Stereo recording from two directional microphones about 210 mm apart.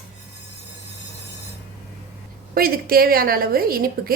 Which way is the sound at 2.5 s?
45° right (ahead or behind).